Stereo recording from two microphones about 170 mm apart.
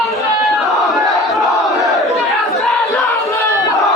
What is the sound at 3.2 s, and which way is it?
Battle cry, 15° left (ahead or behind).